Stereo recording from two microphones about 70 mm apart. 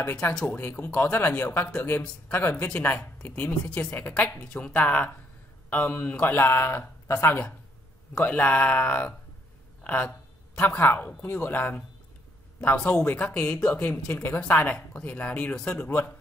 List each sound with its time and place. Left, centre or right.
0.0 s speech: centre
0.5 s speech: left
9.8 s a sound: left
10.8 s speech: left
13.1 s speech: left